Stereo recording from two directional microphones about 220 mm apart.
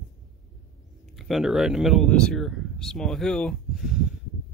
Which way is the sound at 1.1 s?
Centre (ahead or behind).